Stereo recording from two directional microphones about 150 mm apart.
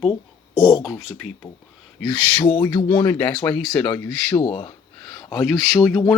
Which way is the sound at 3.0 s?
10° left (ahead or behind).